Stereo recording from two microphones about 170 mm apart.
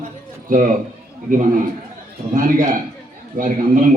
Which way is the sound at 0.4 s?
50° right (ahead or behind).